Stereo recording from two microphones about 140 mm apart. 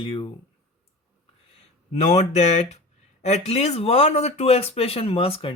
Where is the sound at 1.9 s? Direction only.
50° left (ahead or behind).